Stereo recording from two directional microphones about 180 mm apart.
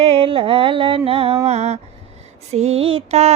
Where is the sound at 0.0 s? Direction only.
35° right (ahead or behind).